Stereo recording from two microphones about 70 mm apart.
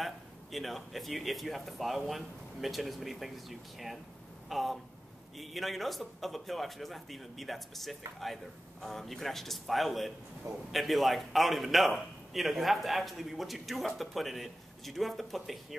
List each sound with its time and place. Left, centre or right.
0.0 s a man's voice: centre